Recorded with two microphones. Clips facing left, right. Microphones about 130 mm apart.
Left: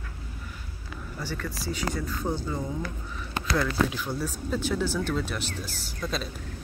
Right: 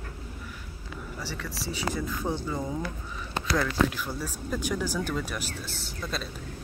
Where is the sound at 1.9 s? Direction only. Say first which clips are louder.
Right 2 dB; 5° right (ahead or behind).